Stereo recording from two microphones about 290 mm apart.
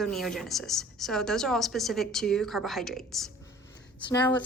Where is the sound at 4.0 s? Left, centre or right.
Centre.